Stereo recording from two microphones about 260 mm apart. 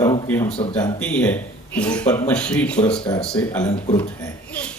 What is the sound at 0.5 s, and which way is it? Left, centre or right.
Speech, left.